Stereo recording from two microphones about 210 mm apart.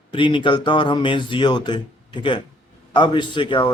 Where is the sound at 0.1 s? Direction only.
25° left (ahead or behind).